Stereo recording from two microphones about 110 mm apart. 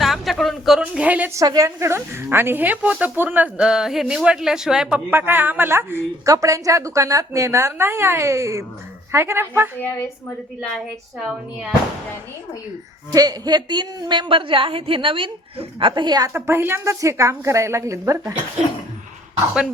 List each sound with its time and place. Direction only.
0.0 s a woman's voice: centre (ahead or behind)
1.3 s a woman's voice: 30° right (ahead or behind)
11.2 s speech: centre (ahead or behind)
13.1 s a woman's voice: 35° right (ahead or behind)
16.3 s a woman's voice: 20° right (ahead or behind)